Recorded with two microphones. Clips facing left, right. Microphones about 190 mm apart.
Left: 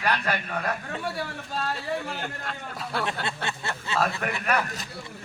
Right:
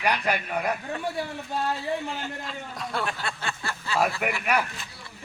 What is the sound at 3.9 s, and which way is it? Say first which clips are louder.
Speech: right 2 dB; 15° right (ahead or behind).